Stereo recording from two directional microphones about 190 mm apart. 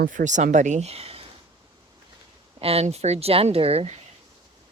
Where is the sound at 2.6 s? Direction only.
30° right (ahead or behind).